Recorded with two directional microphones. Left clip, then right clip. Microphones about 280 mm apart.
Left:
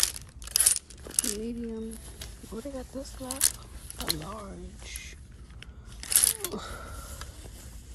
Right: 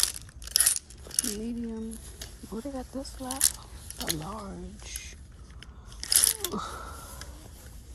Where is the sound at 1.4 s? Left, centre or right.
Centre.